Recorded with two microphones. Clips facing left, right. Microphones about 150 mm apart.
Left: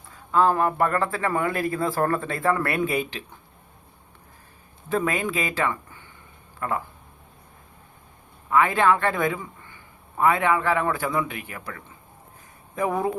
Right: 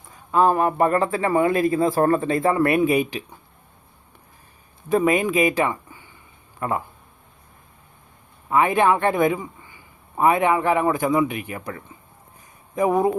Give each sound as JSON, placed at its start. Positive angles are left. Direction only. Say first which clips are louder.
{"t": 0.3, "sound": "a man's voice", "louder": "right 2 dB", "side_deg": -20}
{"t": 4.9, "sound": "speech", "louder": "right 6 dB", "side_deg": -15}
{"t": 8.4, "sound": "a man's voice", "louder": "right 2 dB", "side_deg": -20}